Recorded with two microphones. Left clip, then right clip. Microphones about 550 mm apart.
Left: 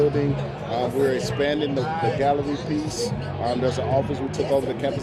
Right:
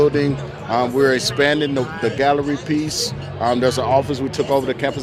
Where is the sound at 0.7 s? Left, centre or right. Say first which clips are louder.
Right 6 dB; right.